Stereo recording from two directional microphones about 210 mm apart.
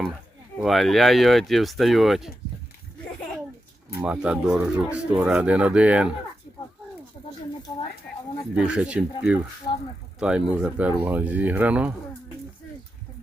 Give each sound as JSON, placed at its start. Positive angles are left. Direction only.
{"t": 0.6, "sound": "speech", "side_deg": 0}
{"t": 4.0, "sound": "speech", "side_deg": -5}
{"t": 8.5, "sound": "speech", "side_deg": -5}
{"t": 9.7, "sound": "speech", "side_deg": 25}
{"t": 10.2, "sound": "speech", "side_deg": -5}